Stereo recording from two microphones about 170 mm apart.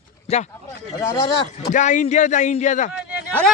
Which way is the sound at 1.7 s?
45° left (ahead or behind).